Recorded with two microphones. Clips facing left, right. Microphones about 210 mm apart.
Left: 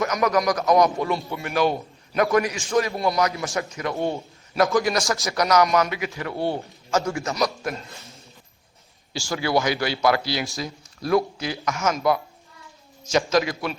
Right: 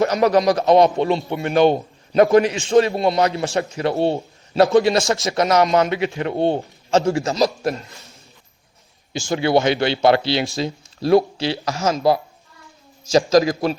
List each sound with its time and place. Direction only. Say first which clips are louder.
0.0 s a man's voice: right 6 dB; 30° right (ahead or behind)
9.1 s a man's voice: right 5 dB; 20° right (ahead or behind)